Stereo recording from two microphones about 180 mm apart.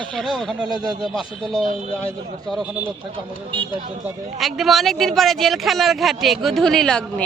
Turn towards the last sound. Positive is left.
turn(degrees=5)  # may be behind; listen again after turning